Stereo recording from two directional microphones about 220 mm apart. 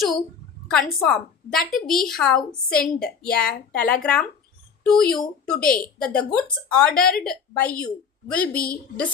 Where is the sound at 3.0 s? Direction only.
45° left (ahead or behind).